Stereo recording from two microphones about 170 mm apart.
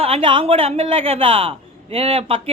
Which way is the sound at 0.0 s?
35° right (ahead or behind).